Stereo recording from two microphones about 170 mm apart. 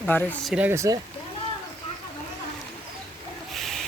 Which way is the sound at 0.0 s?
10° left (ahead or behind).